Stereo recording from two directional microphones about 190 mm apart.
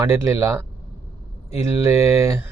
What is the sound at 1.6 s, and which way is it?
Speech, 15° right (ahead or behind).